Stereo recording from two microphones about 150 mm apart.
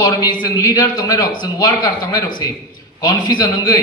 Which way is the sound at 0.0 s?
25° left (ahead or behind).